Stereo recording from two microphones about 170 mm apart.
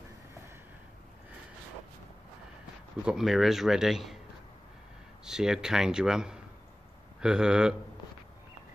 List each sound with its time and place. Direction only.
3.1 s speech: 5° right (ahead or behind)
5.2 s speech: 5° right (ahead or behind)